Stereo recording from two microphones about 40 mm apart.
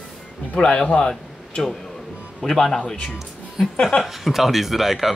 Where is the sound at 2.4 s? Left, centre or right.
Centre.